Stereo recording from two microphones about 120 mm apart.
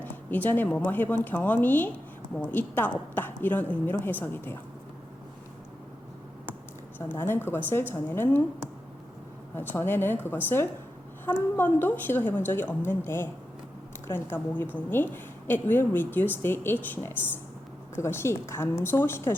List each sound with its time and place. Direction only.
0.0 s a woman's voice: 15° left (ahead or behind)
7.1 s a woman's voice: 20° left (ahead or behind)
9.6 s a woman's voice: 20° left (ahead or behind)